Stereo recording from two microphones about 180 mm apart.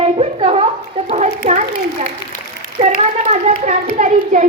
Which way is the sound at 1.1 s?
40° right (ahead or behind).